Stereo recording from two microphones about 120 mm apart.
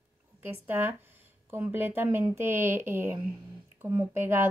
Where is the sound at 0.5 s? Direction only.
15° right (ahead or behind).